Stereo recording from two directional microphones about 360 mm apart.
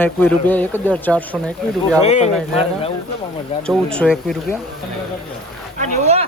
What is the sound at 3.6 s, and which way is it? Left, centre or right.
Speech, centre.